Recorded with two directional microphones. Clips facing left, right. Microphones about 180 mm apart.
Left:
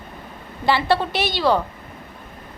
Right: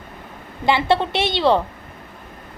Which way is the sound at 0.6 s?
20° right (ahead or behind).